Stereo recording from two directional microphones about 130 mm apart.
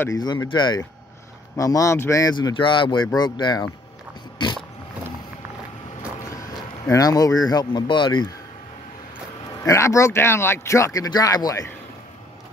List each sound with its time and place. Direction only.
0.1 s speech: 30° left (ahead or behind)
2.3 s speech: 35° left (ahead or behind)
6.2 s a sound: 25° left (ahead or behind)
6.9 s speech: 30° left (ahead or behind)
9.7 s speech: 25° left (ahead or behind)